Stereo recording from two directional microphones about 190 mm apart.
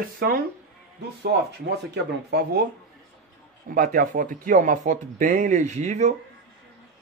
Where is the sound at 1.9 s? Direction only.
60° right (ahead or behind).